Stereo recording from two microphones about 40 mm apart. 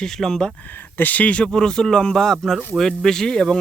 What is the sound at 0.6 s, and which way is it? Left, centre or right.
Speech, left.